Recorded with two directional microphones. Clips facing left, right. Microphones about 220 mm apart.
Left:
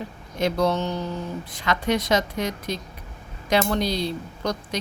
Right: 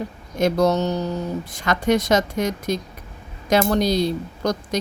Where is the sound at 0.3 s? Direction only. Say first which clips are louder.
Right 4 dB; 45° right (ahead or behind).